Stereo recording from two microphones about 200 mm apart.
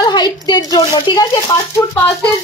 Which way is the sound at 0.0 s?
20° left (ahead or behind).